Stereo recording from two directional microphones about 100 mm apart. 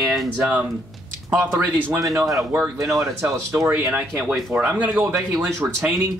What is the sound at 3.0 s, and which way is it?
Speech, 30° right (ahead or behind).